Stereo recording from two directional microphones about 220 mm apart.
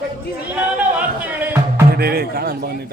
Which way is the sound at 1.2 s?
10° right (ahead or behind).